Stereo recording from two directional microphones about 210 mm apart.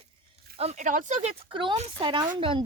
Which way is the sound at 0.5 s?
30° right (ahead or behind).